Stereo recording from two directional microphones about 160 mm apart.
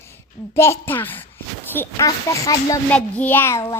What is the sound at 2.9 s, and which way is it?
Speech, 10° left (ahead or behind).